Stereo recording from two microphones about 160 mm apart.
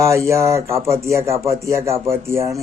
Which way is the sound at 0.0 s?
15° right (ahead or behind).